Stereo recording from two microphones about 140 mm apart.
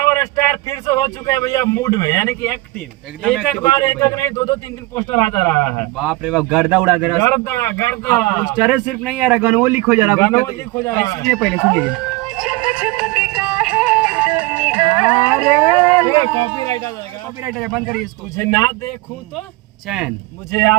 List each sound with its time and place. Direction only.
0.0 s speech: 25° left (ahead or behind)
3.6 s speech: 20° left (ahead or behind)
6.0 s a man's voice: 5° right (ahead or behind)
7.2 s speech: 20° left (ahead or behind)
8.4 s a man's voice: 5° right (ahead or behind)
10.2 s speech: 20° left (ahead or behind)
11.2 s speech: 5° left (ahead or behind)
11.8 s music: 5° right (ahead or behind)
16.0 s speech: 20° left (ahead or behind)
17.5 s speech: centre (ahead or behind)
18.3 s speech: 20° left (ahead or behind)
19.9 s speech: centre (ahead or behind)
20.5 s speech: 20° left (ahead or behind)